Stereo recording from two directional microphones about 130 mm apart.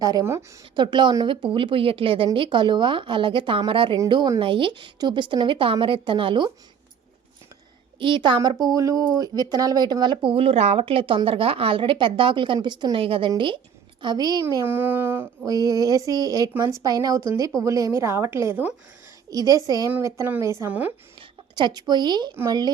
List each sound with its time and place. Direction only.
0.0 s speech: 25° right (ahead or behind)
0.8 s speech: 35° right (ahead or behind)
7.9 s speech: 40° right (ahead or behind)
14.5 s a sound: 15° right (ahead or behind)
15.4 s speech: 25° right (ahead or behind)
19.3 s speech: 25° right (ahead or behind)
20.6 s a sound: 15° right (ahead or behind)
21.2 s a woman's voice: 35° right (ahead or behind)